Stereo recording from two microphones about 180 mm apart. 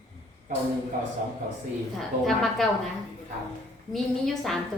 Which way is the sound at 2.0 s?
Centre (ahead or behind).